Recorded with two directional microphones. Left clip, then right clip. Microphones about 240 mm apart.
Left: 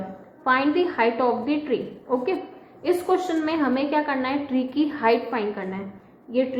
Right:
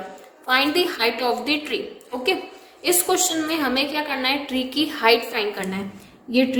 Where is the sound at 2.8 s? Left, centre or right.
Right.